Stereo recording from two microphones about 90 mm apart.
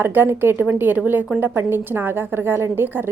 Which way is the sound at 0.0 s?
25° right (ahead or behind).